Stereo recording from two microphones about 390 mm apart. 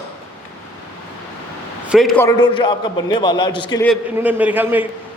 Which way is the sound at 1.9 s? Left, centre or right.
Centre.